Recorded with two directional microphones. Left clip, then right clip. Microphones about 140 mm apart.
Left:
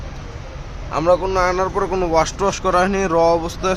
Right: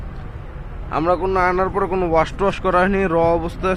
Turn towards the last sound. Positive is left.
turn(degrees=10)  # may be behind; listen again after turning